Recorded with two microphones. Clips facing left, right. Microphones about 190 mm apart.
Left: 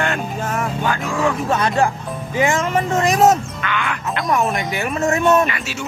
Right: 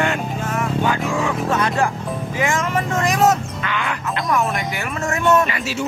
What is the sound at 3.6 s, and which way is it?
Speech, 30° right (ahead or behind).